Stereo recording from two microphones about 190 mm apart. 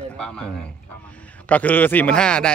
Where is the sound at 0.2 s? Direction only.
5° left (ahead or behind).